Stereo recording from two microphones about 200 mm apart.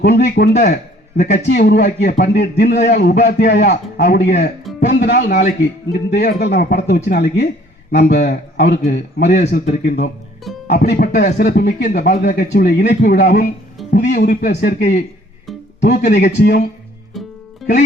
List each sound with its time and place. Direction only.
0.0 s a man's voice: 55° left (ahead or behind)
0.7 s a man's voice: 45° left (ahead or behind)